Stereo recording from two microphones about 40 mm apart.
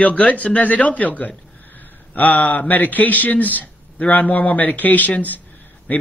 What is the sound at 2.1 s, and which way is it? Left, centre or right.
A man's voice, left.